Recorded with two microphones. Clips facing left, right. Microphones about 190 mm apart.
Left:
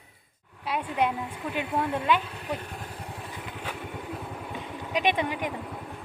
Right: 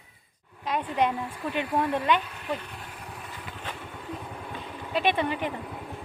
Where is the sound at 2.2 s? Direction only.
35° left (ahead or behind).